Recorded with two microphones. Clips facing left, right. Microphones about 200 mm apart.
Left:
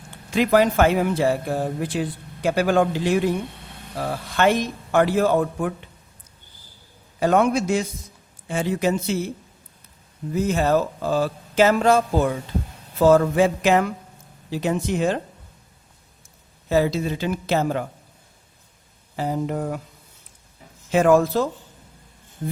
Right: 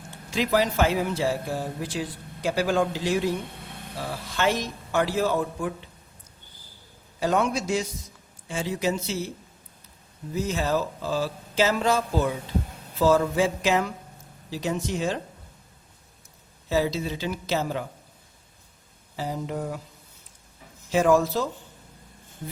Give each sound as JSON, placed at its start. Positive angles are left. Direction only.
{"t": 0.3, "sound": "speech", "side_deg": 55}
{"t": 7.2, "sound": "speech", "side_deg": 55}
{"t": 10.3, "sound": "speech", "side_deg": 55}
{"t": 16.6, "sound": "speech", "side_deg": 55}
{"t": 19.1, "sound": "speech", "side_deg": 55}
{"t": 20.9, "sound": "speech", "side_deg": 55}